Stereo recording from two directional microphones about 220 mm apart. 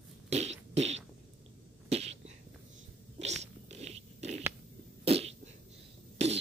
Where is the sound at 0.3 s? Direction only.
30° right (ahead or behind).